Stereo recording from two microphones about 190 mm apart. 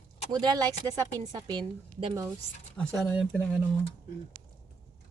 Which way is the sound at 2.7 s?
5° left (ahead or behind).